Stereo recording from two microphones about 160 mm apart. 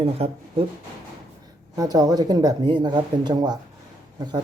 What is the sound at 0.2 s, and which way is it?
Speech, 40° right (ahead or behind).